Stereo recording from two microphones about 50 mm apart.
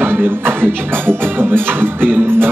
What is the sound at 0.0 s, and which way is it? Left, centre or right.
Music, right.